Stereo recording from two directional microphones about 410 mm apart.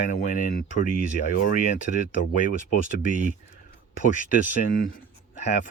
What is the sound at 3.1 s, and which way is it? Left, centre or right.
Speech, centre.